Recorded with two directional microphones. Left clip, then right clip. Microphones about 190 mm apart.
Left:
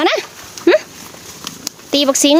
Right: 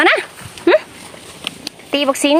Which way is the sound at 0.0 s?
10° left (ahead or behind).